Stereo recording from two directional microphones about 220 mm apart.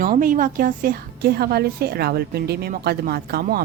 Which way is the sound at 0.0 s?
40° right (ahead or behind).